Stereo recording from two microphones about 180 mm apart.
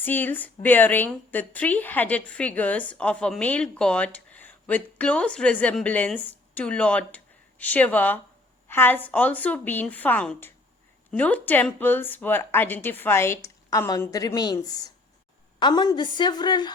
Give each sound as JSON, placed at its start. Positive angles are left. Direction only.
{"t": 0.0, "sound": "a woman's voice", "side_deg": 10}